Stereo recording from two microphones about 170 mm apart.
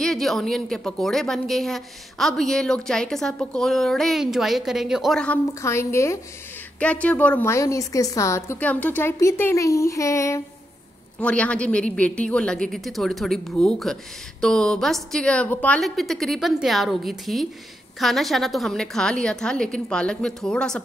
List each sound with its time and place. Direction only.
0.0 s a woman's voice: centre (ahead or behind)
5.5 s a woman's voice: 15° left (ahead or behind)
11.1 s a woman's voice: 5° left (ahead or behind)